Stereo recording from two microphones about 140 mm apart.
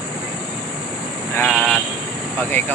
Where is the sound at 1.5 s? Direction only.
10° left (ahead or behind).